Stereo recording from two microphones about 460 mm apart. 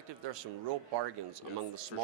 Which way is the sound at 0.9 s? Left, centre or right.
Right.